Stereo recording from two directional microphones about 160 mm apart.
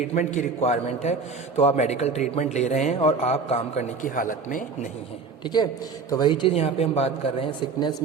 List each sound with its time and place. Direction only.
0.1 s a man's voice: 45° left (ahead or behind)
6.1 s speech: 25° left (ahead or behind)